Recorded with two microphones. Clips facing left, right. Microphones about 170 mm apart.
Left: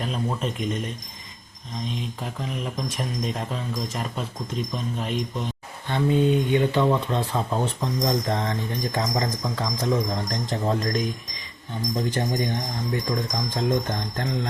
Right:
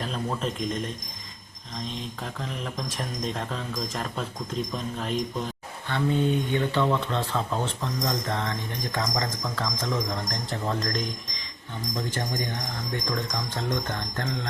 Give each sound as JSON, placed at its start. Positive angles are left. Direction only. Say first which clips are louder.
{"t": 0.0, "sound": "speech", "louder": "left 2 dB", "side_deg": 5}
{"t": 5.9, "sound": "speech", "louder": "left 4 dB", "side_deg": 15}